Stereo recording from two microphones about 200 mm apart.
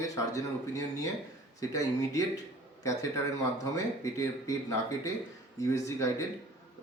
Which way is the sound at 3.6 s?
15° left (ahead or behind).